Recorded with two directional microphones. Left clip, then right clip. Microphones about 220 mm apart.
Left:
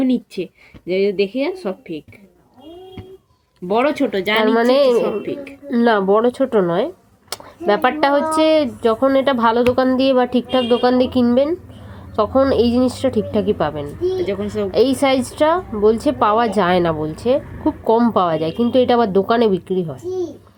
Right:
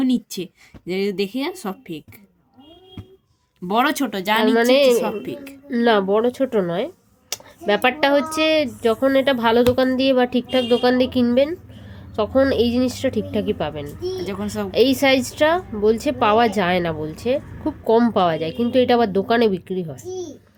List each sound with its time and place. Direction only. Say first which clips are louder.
0.0 s speech: left 3 dB; 65° right (ahead or behind)
3.7 s speech: left 3 dB; 70° right (ahead or behind)
4.5 s speech: left 1 dB; 5° right (ahead or behind)
5.2 s speech: left 5 dB; 65° right (ahead or behind)
5.6 s speech: left 2 dB; 5° right (ahead or behind)
14.3 s speech: left 6 dB; 60° right (ahead or behind)
14.7 s a woman's voice: even; 10° right (ahead or behind)